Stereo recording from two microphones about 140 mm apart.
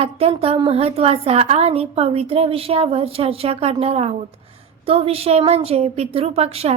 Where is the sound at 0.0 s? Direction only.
45° right (ahead or behind).